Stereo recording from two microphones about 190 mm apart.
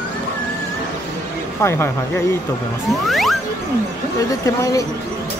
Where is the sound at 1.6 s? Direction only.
15° left (ahead or behind).